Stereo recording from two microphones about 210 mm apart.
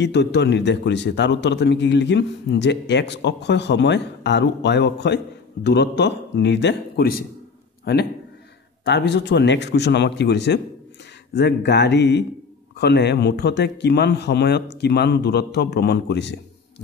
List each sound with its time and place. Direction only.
0.0 s a man's voice: 55° left (ahead or behind)